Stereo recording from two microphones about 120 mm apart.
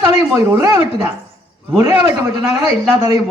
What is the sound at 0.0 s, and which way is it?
Speech, 20° right (ahead or behind).